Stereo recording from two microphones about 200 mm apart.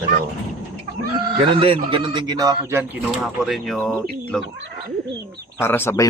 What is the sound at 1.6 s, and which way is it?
A man's voice, 25° right (ahead or behind).